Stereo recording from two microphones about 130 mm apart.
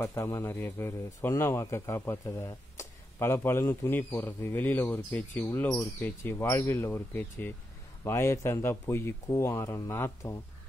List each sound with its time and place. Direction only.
0.0 s speech: 20° left (ahead or behind)